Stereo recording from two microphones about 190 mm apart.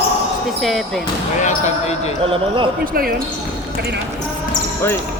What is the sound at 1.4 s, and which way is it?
Speech, 35° left (ahead or behind).